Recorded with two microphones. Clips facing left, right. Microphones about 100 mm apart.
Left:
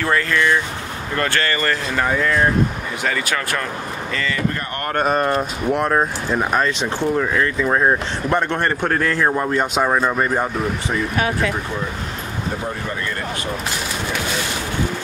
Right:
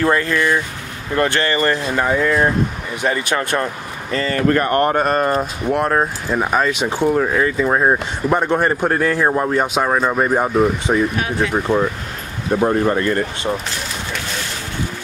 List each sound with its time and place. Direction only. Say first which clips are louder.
0.0 s speech: right 2 dB; 25° right (ahead or behind)
4.4 s speech: right 8 dB; 60° right (ahead or behind)
4.9 s speech: right 2 dB; centre (ahead or behind)
10.9 s speech: right 6 dB; 25° right (ahead or behind)
12.6 s speech: right 10 dB; 50° right (ahead or behind)